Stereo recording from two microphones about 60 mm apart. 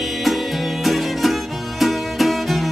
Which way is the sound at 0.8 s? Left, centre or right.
Centre.